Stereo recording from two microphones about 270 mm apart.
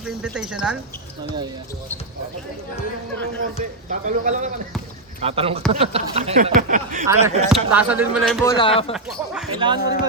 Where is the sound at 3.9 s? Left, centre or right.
Right.